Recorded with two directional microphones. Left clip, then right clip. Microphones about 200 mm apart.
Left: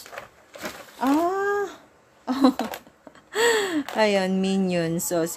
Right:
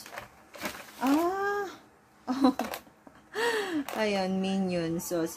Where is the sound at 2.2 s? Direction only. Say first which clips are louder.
Left 5 dB; 45° left (ahead or behind).